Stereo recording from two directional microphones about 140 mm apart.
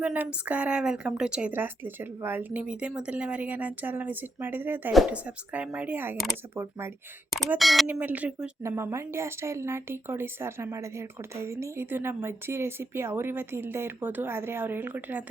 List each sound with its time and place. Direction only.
0.0 s a woman's voice: 10° right (ahead or behind)
7.6 s speech: centre (ahead or behind)
7.9 s a woman's voice: 10° right (ahead or behind)